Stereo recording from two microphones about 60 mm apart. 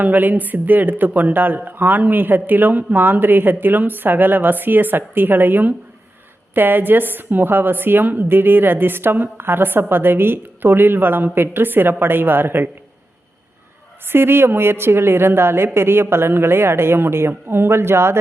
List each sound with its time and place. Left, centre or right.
0.0 s a woman's voice: right
14.1 s a woman's voice: right